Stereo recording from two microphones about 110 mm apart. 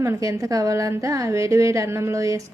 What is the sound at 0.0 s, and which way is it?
A woman's voice, 30° right (ahead or behind).